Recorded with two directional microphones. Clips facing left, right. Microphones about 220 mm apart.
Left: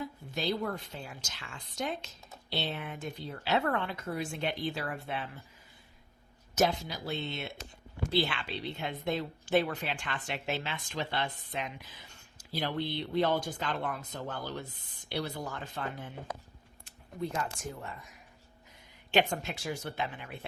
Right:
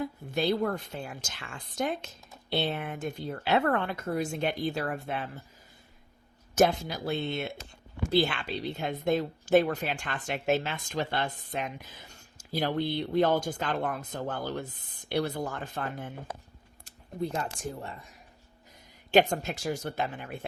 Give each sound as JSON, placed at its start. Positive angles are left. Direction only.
{"t": 0.0, "sound": "a woman's voice", "side_deg": -55}
{"t": 6.6, "sound": "a woman's voice", "side_deg": -50}
{"t": 16.8, "sound": "a sound", "side_deg": -35}
{"t": 17.6, "sound": "speech", "side_deg": -30}
{"t": 19.1, "sound": "a woman's voice", "side_deg": -40}